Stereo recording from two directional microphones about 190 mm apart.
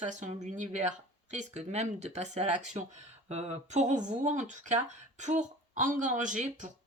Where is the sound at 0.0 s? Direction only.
40° right (ahead or behind).